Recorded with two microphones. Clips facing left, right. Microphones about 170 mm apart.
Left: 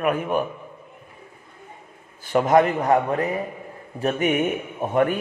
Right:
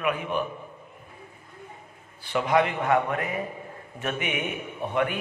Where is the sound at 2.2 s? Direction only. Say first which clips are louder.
Left 6 dB; 45° left (ahead or behind).